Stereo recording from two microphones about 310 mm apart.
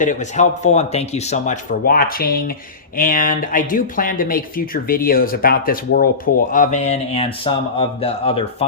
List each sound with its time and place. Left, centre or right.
0.0 s speech: left